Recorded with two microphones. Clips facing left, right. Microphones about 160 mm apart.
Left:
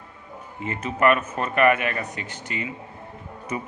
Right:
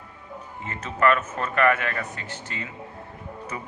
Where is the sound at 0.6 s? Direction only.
15° left (ahead or behind).